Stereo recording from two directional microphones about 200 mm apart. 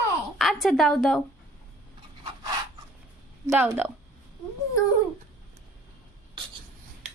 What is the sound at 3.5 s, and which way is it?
Speech, 10° right (ahead or behind).